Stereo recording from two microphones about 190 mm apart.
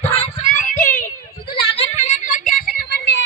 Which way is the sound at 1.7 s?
35° left (ahead or behind).